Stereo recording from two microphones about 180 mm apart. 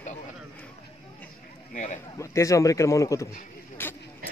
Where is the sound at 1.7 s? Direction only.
40° left (ahead or behind).